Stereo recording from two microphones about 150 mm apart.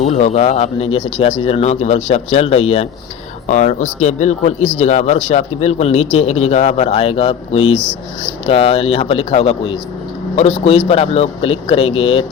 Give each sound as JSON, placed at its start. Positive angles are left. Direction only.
{"t": 0.0, "sound": "a man's voice", "side_deg": 50}